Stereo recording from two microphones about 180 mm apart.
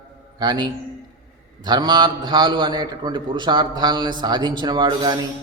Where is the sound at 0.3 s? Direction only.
25° right (ahead or behind).